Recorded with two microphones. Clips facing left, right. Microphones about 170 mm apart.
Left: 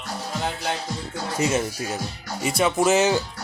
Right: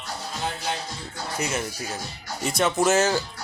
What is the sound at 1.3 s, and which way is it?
Speech, 20° left (ahead or behind).